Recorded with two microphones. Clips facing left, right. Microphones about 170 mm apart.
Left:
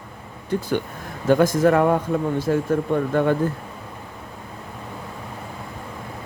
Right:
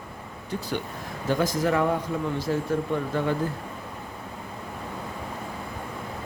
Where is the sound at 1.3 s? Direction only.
55° left (ahead or behind).